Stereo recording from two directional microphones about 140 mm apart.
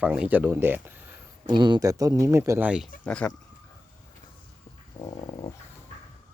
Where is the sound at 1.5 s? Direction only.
35° right (ahead or behind).